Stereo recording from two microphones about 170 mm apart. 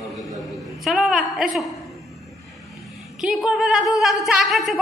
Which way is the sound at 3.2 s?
Centre (ahead or behind).